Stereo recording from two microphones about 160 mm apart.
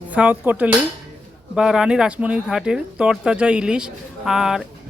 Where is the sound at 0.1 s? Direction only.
10° right (ahead or behind).